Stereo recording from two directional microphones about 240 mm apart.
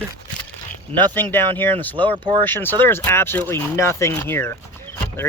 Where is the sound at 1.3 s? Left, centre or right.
Centre.